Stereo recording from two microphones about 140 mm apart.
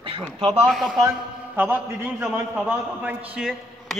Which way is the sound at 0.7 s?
Centre (ahead or behind).